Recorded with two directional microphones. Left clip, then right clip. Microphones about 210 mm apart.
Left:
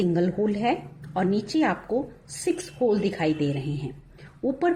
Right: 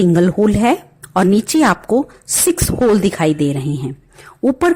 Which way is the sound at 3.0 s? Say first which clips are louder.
Right 9 dB; 45° right (ahead or behind).